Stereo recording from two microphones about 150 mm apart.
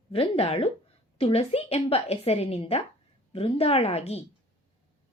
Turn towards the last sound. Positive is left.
turn(degrees=45)  # may be behind; listen again after turning